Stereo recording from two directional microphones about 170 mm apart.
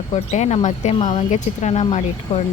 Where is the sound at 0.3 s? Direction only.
40° left (ahead or behind).